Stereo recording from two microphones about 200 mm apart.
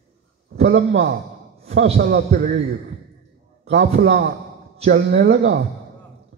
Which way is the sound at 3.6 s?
55° right (ahead or behind).